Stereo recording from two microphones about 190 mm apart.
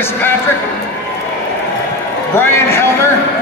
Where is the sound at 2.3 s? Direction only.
15° left (ahead or behind).